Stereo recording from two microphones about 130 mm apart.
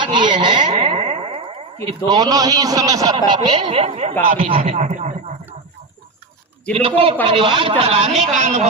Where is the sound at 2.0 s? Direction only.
30° right (ahead or behind); by 4.8 s 45° right (ahead or behind).